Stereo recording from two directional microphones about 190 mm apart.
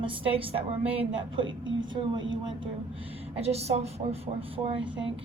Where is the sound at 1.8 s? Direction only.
25° right (ahead or behind).